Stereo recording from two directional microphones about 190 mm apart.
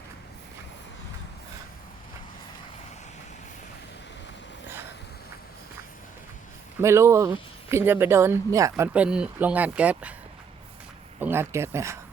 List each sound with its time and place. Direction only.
6.8 s speech: 15° right (ahead or behind)
11.2 s speech: 10° right (ahead or behind)